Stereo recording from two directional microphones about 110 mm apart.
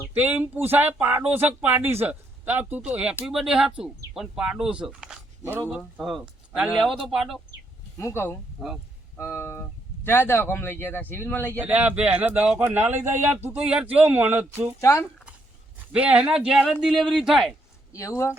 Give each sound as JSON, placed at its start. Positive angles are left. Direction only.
{"t": 0.1, "sound": "speech", "side_deg": -15}
{"t": 5.5, "sound": "speech", "side_deg": -15}
{"t": 5.7, "sound": "speech", "side_deg": 0}
{"t": 7.9, "sound": "speech", "side_deg": 25}
{"t": 8.5, "sound": "speech", "side_deg": -5}
{"t": 9.1, "sound": "speech", "side_deg": 20}
{"t": 11.6, "sound": "speech", "side_deg": -15}
{"t": 14.8, "sound": "speech", "side_deg": 25}
{"t": 15.9, "sound": "speech", "side_deg": -10}